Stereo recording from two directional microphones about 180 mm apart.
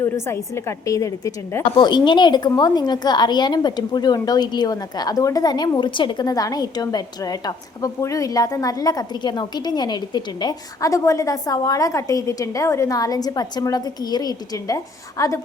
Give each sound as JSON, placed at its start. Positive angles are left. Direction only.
{"t": 0.0, "sound": "a woman's voice", "side_deg": 15}